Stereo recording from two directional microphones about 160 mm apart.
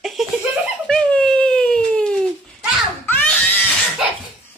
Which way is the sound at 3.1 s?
10° left (ahead or behind).